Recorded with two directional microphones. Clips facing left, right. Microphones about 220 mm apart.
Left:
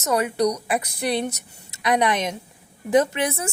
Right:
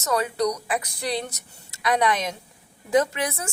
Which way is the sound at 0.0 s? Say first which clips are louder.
Left 3 dB; 20° left (ahead or behind).